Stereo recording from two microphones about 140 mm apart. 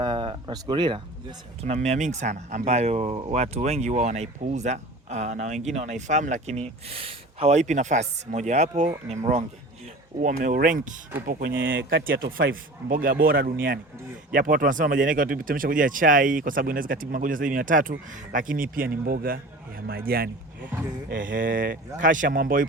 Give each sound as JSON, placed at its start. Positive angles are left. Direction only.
{"t": 0.0, "sound": "a sound", "side_deg": -35}
{"t": 1.6, "sound": "speech", "side_deg": -55}
{"t": 10.2, "sound": "speech", "side_deg": -70}
{"t": 11.3, "sound": "speech", "side_deg": -90}
{"t": 21.1, "sound": "speech", "side_deg": -75}
{"t": 22.0, "sound": "speech", "side_deg": -70}